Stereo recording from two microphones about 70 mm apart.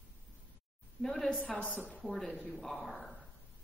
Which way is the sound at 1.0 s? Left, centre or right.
Centre.